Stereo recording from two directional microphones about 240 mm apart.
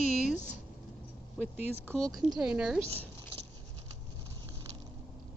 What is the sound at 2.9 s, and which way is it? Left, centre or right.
Zipper, right.